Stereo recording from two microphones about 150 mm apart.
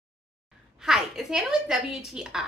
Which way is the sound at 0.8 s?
5° right (ahead or behind).